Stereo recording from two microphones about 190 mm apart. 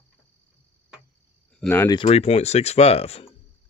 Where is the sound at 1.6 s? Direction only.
10° left (ahead or behind).